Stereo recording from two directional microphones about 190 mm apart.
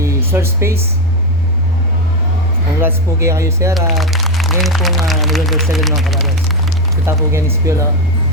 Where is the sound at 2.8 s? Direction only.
15° right (ahead or behind).